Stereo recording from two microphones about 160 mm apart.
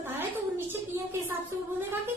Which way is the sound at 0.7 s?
15° right (ahead or behind).